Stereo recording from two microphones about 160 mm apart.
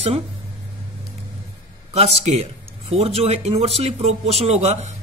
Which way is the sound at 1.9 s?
40° right (ahead or behind).